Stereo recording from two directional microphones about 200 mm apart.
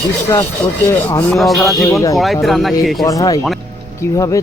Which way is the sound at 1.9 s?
15° left (ahead or behind).